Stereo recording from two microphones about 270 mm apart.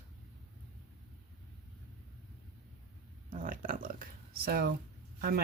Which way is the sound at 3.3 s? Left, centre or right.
Right.